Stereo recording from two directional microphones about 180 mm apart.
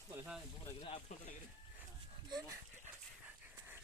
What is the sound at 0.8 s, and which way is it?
Speech, 35° left (ahead or behind).